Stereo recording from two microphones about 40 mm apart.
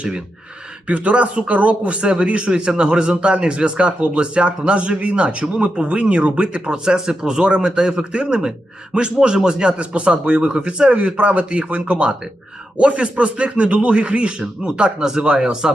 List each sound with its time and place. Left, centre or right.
0.9 s speech: right; by 15.8 s centre